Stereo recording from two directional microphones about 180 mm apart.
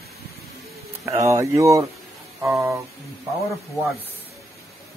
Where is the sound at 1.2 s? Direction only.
15° right (ahead or behind).